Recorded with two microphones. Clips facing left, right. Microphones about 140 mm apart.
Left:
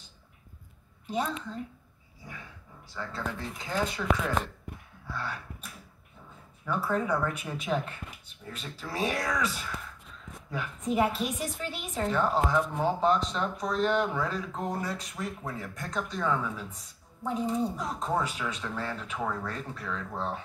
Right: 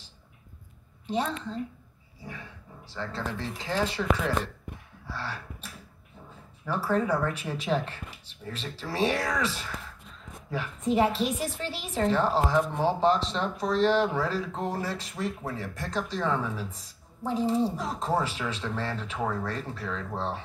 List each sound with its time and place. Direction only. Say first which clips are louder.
1.0 s speech: right 2 dB; 30° right (ahead or behind)
2.9 s speech: right 2 dB; 30° right (ahead or behind)
5.0 s a sound: even; 30° right (ahead or behind)
7.1 s speech: right 2 dB; 30° right (ahead or behind)